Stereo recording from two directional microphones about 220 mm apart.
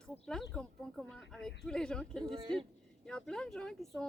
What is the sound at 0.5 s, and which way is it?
Speech, centre (ahead or behind).